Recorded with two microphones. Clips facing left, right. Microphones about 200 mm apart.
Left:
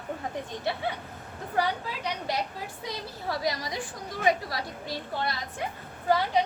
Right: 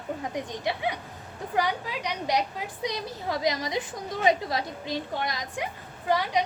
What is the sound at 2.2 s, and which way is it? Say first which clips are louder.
A woman's voice: right 4 dB; 15° right (ahead or behind).